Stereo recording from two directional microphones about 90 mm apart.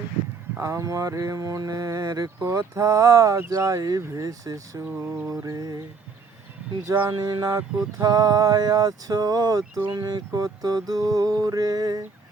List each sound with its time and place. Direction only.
0.6 s mantra: 35° right (ahead or behind)
4.9 s mantra: 25° right (ahead or behind)
5.3 s mantra: 40° right (ahead or behind)
6.9 s speech: 65° right (ahead or behind)
7.2 s a sound: 40° right (ahead or behind)